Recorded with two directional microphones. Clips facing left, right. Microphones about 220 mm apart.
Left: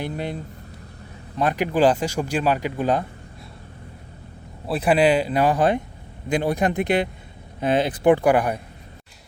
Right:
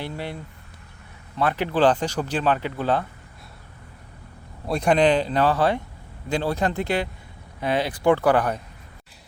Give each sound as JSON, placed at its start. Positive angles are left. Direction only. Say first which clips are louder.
{"t": 0.0, "sound": "speech", "louder": "left 3 dB", "side_deg": 20}
{"t": 1.4, "sound": "speech", "louder": "left 1 dB", "side_deg": 15}
{"t": 4.6, "sound": "speech", "louder": "left 1 dB", "side_deg": 5}